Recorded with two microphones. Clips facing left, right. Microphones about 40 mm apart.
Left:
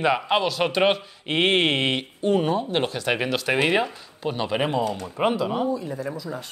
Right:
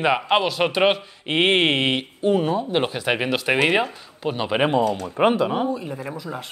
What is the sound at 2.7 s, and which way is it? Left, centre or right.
A man's voice, centre.